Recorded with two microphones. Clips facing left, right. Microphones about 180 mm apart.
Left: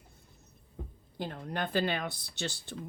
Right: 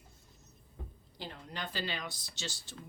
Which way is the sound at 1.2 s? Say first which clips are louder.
Left 7 dB; 50° left (ahead or behind).